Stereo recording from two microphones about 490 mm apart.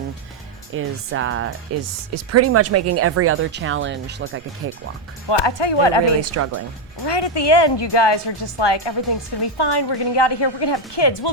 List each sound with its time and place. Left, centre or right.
0.7 s speech: right
5.3 s a woman's voice: left
6.3 s speech: right
7.0 s a woman's voice: left